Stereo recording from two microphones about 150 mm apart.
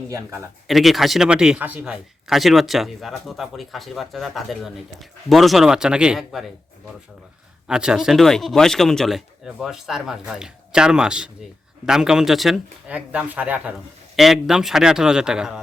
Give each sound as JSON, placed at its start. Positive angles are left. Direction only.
{"t": 0.1, "sound": "speech", "side_deg": -20}
{"t": 0.7, "sound": "a man's voice", "side_deg": 0}